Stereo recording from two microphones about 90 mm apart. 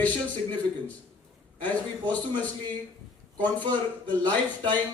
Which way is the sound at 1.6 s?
15° left (ahead or behind).